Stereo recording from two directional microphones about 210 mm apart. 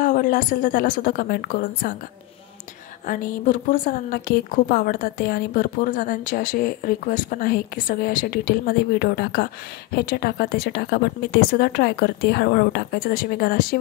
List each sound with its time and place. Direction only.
0.0 s a woman's voice: 40° left (ahead or behind)
3.1 s a woman's voice: 40° left (ahead or behind)